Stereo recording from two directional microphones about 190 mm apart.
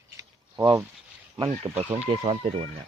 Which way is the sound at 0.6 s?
15° right (ahead or behind).